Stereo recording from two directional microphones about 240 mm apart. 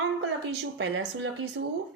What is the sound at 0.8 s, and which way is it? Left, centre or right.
Speech, right.